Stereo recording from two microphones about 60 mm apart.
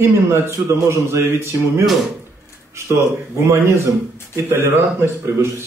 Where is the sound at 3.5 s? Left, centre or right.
Right.